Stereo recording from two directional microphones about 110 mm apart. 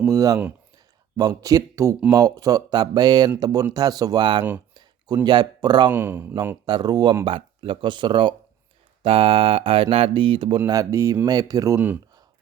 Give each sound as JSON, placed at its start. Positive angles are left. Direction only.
{"t": 0.1, "sound": "speech", "side_deg": -30}
{"t": 5.9, "sound": "speech", "side_deg": -20}
{"t": 6.7, "sound": "speech", "side_deg": -40}
{"t": 7.3, "sound": "speech", "side_deg": -55}
{"t": 9.0, "sound": "speech", "side_deg": -60}
{"t": 10.7, "sound": "speech", "side_deg": -30}